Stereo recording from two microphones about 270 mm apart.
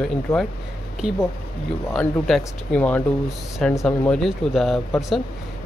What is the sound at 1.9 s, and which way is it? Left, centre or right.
Speech, centre.